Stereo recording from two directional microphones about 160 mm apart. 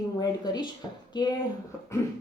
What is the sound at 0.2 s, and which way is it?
Speech, 25° left (ahead or behind).